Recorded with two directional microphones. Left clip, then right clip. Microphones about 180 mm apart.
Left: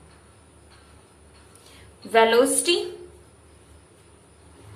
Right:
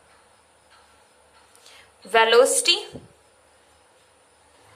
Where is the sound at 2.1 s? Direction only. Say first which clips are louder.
Right 1 dB; 30° right (ahead or behind).